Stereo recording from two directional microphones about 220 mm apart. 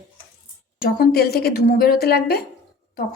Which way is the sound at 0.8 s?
45° left (ahead or behind).